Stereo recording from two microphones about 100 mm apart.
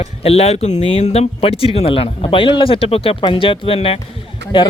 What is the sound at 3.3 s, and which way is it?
Speech, 60° left (ahead or behind).